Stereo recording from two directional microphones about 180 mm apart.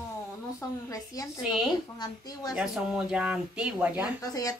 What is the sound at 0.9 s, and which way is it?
A woman's voice, 20° left (ahead or behind).